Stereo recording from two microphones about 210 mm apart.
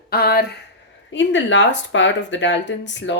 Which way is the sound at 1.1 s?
60° left (ahead or behind).